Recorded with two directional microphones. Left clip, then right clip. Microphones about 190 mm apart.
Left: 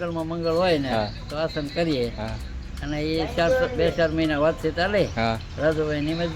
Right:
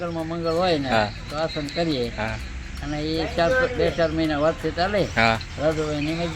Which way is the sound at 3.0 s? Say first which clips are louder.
Even; 30° left (ahead or behind).